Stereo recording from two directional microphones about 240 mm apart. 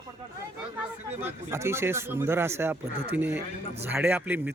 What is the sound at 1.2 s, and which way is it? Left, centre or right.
Speech, centre.